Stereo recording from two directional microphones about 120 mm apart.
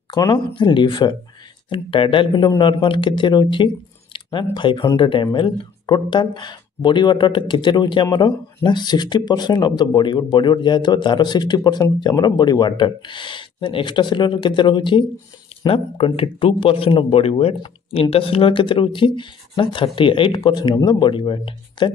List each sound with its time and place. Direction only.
0.1 s speech: 40° left (ahead or behind)